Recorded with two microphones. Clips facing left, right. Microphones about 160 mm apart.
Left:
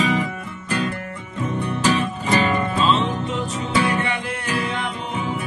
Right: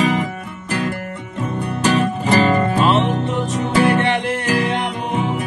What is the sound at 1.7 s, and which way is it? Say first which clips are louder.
Music: right 4 dB; 65° right (ahead or behind).